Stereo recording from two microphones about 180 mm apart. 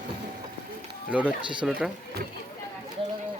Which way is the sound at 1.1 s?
5° right (ahead or behind).